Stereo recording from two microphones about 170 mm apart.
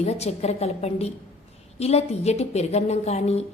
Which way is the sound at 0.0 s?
40° left (ahead or behind).